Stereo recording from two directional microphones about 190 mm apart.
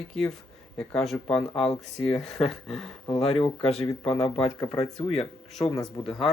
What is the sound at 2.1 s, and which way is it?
Speech, centre (ahead or behind).